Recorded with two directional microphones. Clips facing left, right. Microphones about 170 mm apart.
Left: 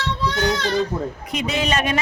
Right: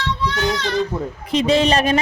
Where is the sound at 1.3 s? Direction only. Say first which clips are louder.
Right 8 dB; 30° right (ahead or behind).